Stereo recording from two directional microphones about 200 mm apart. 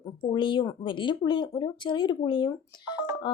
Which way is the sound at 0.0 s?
25° left (ahead or behind).